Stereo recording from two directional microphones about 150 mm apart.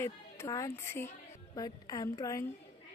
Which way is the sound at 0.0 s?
20° left (ahead or behind).